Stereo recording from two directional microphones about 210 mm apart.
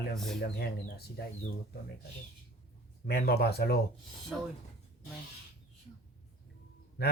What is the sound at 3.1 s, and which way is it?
Speech, 50° left (ahead or behind).